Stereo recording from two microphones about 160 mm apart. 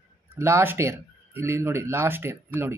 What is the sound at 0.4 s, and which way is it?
Speech, 15° right (ahead or behind).